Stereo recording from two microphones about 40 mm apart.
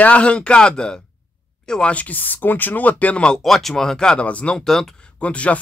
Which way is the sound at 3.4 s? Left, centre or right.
Centre.